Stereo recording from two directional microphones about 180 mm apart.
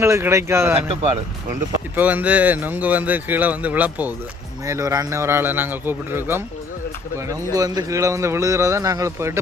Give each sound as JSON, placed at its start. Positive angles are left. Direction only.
{"t": 0.0, "sound": "speech", "side_deg": -15}
{"t": 0.9, "sound": "speech", "side_deg": -35}
{"t": 2.0, "sound": "speech", "side_deg": -10}
{"t": 7.5, "sound": "speech", "side_deg": -20}